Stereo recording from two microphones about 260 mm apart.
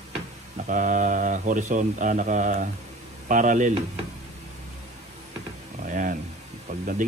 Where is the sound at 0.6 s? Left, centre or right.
Right.